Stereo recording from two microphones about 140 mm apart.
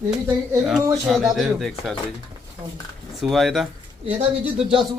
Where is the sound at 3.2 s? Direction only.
Centre (ahead or behind).